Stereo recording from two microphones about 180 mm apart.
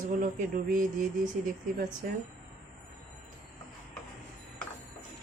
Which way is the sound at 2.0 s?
50° right (ahead or behind).